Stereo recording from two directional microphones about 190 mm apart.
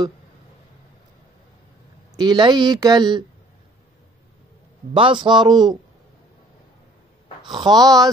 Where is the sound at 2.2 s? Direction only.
25° right (ahead or behind).